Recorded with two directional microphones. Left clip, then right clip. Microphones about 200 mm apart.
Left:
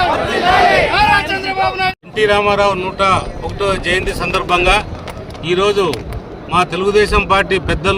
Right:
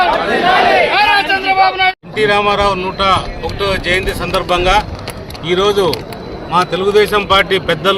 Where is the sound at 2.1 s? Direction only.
30° left (ahead or behind).